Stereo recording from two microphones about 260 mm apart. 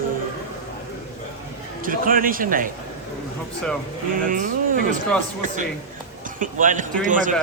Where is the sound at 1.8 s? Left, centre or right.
Right.